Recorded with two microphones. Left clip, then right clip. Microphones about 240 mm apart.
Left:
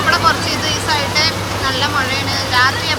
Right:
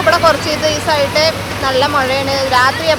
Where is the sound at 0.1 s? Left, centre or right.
Centre.